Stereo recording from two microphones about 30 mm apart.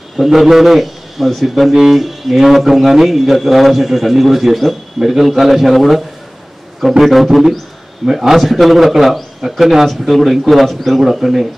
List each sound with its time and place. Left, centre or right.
0.2 s a man's voice: centre
1.7 s a man's voice: centre
2.0 s speech: centre
8.0 s a man's voice: centre
8.4 s speech: centre
9.8 s a man's voice: centre